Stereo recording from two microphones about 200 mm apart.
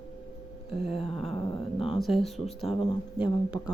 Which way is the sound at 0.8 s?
30° left (ahead or behind).